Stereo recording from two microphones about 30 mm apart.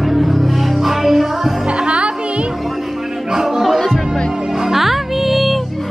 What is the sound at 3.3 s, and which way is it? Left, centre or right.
Music, centre.